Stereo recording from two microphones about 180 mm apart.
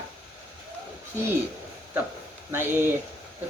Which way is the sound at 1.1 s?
15° right (ahead or behind).